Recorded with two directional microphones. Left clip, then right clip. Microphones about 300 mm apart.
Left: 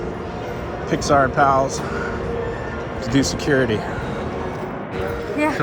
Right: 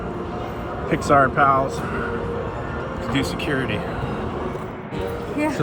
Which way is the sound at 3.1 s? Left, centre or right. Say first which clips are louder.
Left 5 dB; centre.